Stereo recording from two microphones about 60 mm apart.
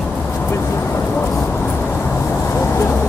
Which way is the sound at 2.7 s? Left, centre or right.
Left.